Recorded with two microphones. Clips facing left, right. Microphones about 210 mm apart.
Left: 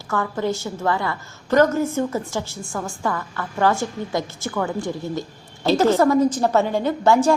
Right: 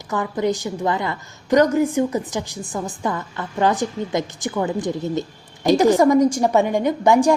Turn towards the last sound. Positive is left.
turn(degrees=-15)  # may be behind; listen again after turning